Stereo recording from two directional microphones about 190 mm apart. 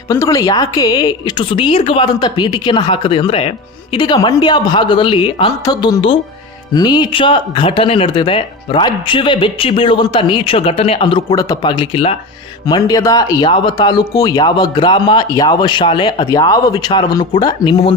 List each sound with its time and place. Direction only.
0.1 s speech: 20° left (ahead or behind)